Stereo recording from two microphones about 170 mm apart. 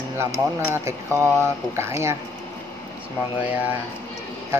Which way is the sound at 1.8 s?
15° right (ahead or behind).